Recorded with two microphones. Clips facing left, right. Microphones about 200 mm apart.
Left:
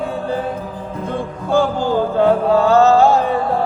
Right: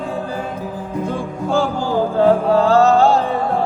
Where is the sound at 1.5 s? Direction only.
20° left (ahead or behind).